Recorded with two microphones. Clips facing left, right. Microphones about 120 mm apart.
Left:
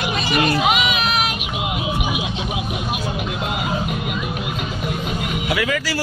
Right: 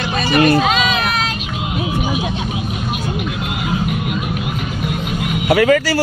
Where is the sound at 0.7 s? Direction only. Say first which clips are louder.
Right 2 dB; 15° left (ahead or behind).